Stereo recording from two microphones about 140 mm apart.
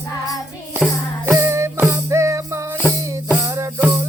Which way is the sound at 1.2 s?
20° right (ahead or behind).